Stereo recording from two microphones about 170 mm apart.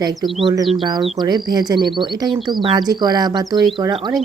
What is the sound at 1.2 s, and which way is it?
Speech, 25° right (ahead or behind).